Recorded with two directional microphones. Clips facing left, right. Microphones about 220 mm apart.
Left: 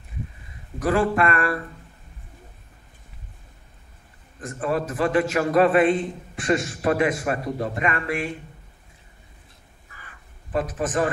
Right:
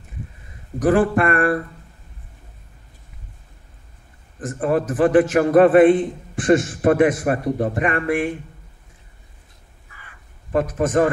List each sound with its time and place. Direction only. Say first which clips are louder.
0.8 s a man's voice: right 4 dB; 50° right (ahead or behind)
4.6 s a man's voice: right 6 dB; 50° right (ahead or behind)
10.5 s a man's voice: right 6 dB; 50° right (ahead or behind)